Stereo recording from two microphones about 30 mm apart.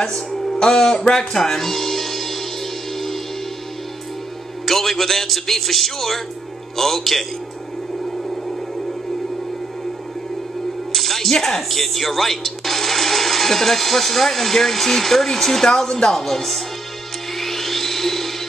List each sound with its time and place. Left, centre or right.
0.1 s speech: centre
0.6 s music: left; by 2.4 s centre
4.6 s speech: centre
10.9 s music: centre
11.4 s speech: centre
17.4 s music: centre